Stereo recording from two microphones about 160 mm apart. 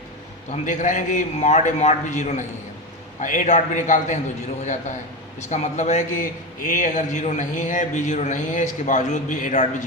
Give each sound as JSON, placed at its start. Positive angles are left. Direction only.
{"t": 0.5, "sound": "a man's voice", "side_deg": 50}